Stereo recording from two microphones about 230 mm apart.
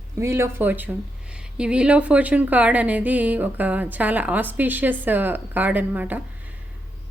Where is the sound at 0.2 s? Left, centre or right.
Centre.